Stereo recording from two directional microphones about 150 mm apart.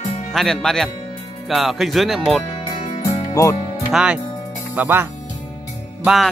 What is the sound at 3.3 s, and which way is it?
Speech, 20° left (ahead or behind).